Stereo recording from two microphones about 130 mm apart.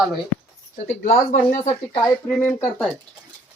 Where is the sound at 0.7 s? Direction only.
70° left (ahead or behind).